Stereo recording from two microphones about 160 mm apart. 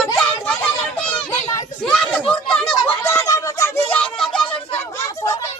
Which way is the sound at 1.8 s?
5° left (ahead or behind).